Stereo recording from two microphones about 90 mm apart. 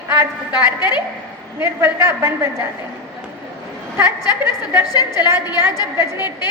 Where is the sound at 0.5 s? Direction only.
50° left (ahead or behind).